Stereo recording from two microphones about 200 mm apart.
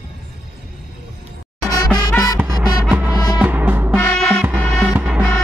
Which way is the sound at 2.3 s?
15° right (ahead or behind).